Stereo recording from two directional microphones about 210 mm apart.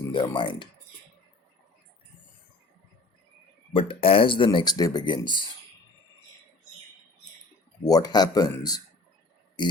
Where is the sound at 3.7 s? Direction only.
25° left (ahead or behind).